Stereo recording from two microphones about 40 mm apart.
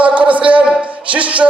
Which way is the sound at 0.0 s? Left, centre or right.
Right.